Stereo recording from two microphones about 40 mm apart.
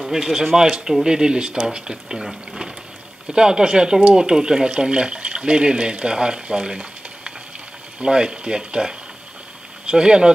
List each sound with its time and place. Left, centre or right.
0.1 s speech: centre
3.3 s speech: centre